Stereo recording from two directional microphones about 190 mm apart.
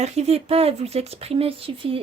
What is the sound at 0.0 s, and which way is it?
Speech, 35° right (ahead or behind).